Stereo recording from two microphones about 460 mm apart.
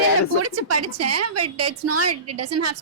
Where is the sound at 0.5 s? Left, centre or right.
Right.